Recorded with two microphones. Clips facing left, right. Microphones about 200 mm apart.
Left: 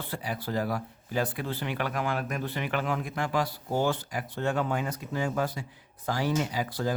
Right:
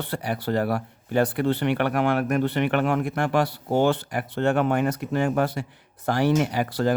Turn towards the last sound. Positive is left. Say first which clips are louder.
# right 7 dB
turn(degrees=-70)  # may be behind; listen again after turning